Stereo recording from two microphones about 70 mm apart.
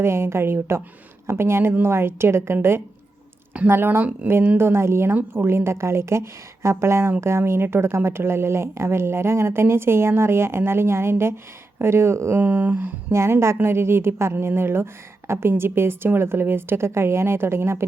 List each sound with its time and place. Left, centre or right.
0.0 s speech: right
12.4 s speech: right
13.1 s speech: right